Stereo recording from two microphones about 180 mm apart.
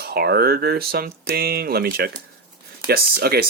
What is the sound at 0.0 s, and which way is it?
Speech, 60° right (ahead or behind).